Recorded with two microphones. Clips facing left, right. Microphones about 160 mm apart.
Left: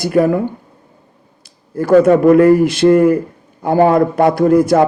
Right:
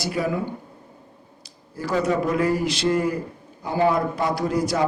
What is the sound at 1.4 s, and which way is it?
A man's voice, 55° left (ahead or behind).